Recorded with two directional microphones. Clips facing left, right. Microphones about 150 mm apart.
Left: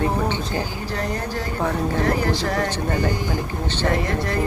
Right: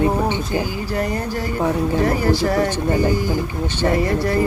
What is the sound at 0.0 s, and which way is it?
Speech, 15° right (ahead or behind).